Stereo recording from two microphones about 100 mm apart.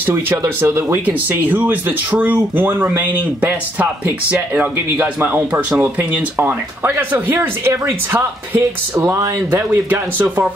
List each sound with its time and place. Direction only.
0.6 s speech: 25° right (ahead or behind)